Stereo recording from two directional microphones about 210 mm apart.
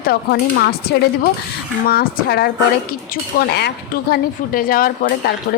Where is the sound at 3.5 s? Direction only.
50° left (ahead or behind).